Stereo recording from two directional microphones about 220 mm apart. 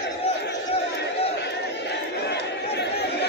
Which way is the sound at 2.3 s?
50° left (ahead or behind).